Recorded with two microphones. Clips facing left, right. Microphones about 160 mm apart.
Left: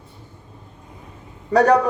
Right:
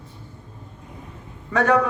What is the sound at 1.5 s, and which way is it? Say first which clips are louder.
Speech: left 5 dB; 35° left (ahead or behind).